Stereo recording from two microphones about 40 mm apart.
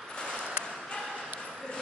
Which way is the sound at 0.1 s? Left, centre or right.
Left.